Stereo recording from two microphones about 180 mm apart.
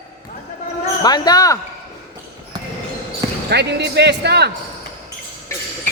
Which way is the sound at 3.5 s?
70° right (ahead or behind).